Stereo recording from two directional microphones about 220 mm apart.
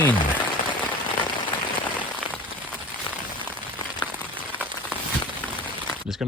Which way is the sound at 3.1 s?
20° left (ahead or behind).